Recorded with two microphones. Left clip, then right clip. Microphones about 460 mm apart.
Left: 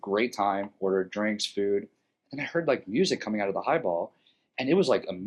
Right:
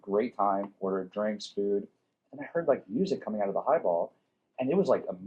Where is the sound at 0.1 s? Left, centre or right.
Left.